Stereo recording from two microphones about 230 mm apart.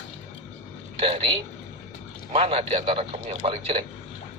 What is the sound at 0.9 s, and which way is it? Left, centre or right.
A man's voice, right.